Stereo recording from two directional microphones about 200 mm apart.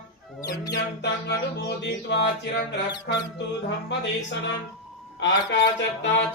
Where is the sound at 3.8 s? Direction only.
65° left (ahead or behind).